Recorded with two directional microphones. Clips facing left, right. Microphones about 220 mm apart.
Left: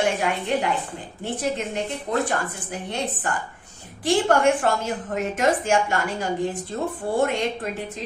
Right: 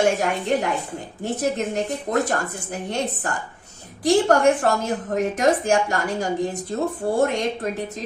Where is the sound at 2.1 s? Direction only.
45° right (ahead or behind).